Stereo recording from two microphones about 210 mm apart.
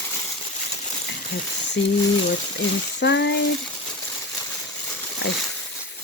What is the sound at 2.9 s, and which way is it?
Speech, 55° left (ahead or behind).